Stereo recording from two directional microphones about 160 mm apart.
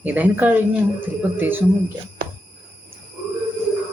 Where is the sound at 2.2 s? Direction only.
65° right (ahead or behind).